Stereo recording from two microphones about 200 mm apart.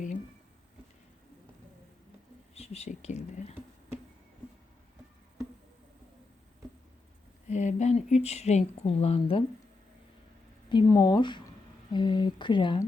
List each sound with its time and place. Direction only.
2.6 s speech: 35° left (ahead or behind)
7.4 s speech: 35° left (ahead or behind)
10.7 s speech: 20° left (ahead or behind)